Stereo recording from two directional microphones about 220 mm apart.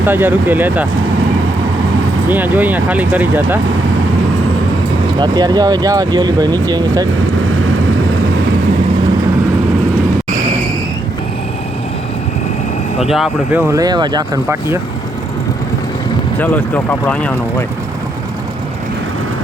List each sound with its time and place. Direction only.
0.0 s speech: 10° right (ahead or behind)
2.3 s speech: 10° right (ahead or behind)
5.2 s speech: 20° right (ahead or behind)
13.0 s speech: centre (ahead or behind)
16.4 s speech: 5° left (ahead or behind)